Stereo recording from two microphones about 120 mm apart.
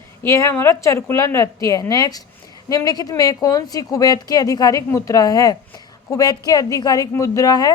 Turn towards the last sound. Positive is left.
turn(degrees=30)  # may be behind; listen again after turning